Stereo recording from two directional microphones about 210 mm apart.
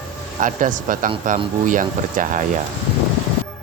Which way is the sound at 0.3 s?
40° right (ahead or behind).